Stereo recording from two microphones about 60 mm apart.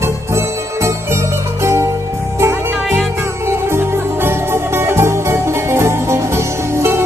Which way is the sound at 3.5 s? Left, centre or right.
Right.